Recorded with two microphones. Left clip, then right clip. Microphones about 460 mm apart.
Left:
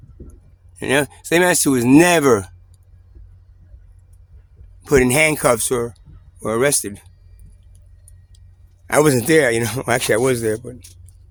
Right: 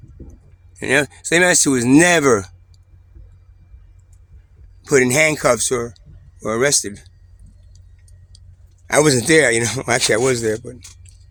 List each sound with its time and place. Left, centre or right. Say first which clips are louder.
0.7 s speech: right 1 dB; left
4.8 s speech: even; left
8.9 s speech: right 1 dB; left